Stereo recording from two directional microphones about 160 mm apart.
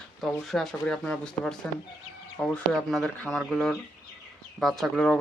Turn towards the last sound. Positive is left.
turn(degrees=5)  # may be behind; listen again after turning